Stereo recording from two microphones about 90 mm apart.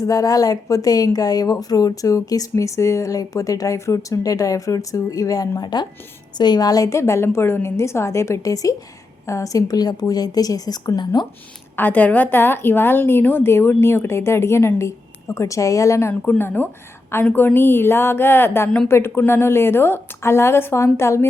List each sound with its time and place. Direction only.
0.0 s a woman's voice: 40° left (ahead or behind)
11.8 s a woman's voice: 20° left (ahead or behind)
16.4 s a woman's voice: 20° left (ahead or behind)